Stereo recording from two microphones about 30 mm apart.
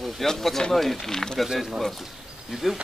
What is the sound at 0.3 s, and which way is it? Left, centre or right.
Speech, centre.